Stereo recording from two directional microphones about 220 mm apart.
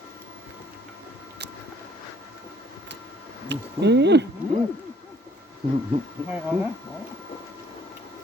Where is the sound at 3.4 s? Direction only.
50° right (ahead or behind).